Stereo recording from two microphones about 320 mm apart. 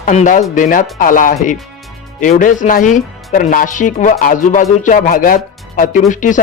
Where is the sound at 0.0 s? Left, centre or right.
Left.